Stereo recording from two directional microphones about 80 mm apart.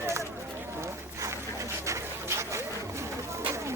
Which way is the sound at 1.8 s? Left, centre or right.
Right.